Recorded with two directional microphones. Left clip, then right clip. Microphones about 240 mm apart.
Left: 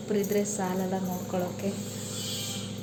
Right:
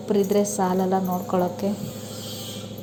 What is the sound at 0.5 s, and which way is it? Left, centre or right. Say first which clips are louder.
A woman's voice: right 9 dB; right.